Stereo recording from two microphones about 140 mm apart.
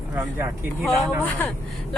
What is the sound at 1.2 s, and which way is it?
Speech, 10° left (ahead or behind).